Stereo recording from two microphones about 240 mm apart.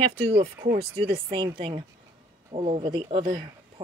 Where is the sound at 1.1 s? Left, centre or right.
Right.